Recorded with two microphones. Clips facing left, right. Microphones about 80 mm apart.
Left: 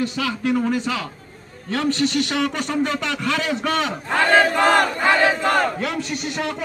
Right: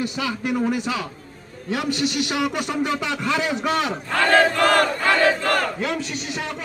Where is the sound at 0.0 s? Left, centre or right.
Centre.